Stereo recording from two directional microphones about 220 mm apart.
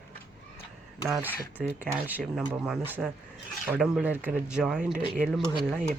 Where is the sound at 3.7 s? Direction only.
5° right (ahead or behind).